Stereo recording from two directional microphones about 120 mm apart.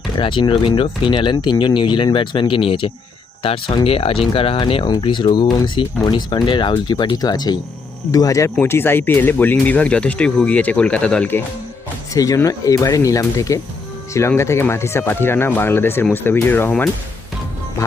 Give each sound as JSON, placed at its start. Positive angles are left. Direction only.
{"t": 0.2, "sound": "speech", "side_deg": 45}
{"t": 12.1, "sound": "speech", "side_deg": 30}